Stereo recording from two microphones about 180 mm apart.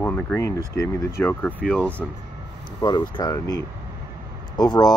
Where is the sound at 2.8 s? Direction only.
20° left (ahead or behind).